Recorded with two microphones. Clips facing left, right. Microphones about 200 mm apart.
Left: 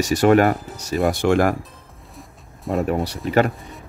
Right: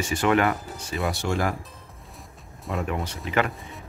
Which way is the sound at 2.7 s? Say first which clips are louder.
Left 7 dB; 40° left (ahead or behind).